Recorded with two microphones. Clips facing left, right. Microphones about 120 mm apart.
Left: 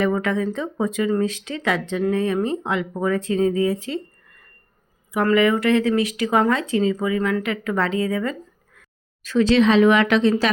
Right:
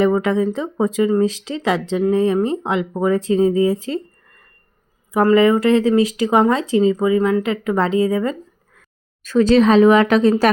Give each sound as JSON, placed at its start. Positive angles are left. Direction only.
{"t": 0.0, "sound": "speech", "side_deg": -30}
{"t": 9.2, "sound": "speech", "side_deg": -45}